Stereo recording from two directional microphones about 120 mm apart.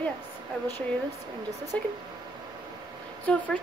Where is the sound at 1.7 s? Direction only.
10° left (ahead or behind).